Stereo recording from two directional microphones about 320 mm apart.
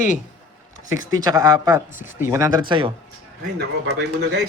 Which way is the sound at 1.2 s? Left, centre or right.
Centre.